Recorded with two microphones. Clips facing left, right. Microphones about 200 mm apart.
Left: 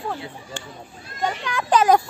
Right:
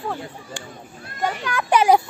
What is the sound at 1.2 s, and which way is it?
Speech, 5° right (ahead or behind).